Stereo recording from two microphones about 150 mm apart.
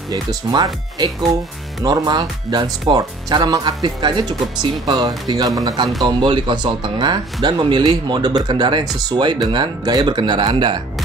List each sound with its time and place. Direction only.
0.1 s speech: 25° right (ahead or behind)
1.9 s speech: 25° right (ahead or behind)